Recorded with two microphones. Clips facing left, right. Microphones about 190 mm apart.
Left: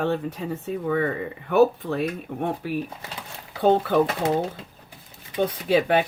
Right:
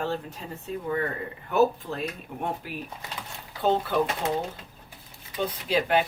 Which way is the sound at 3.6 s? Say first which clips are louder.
Left 5 dB; 55° left (ahead or behind).